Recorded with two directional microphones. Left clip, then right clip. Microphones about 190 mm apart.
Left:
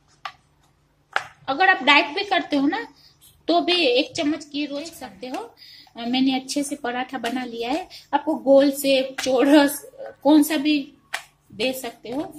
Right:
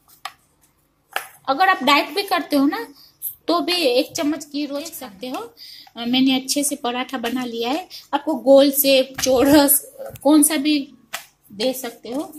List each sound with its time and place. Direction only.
1.4 s a woman's voice: 15° right (ahead or behind)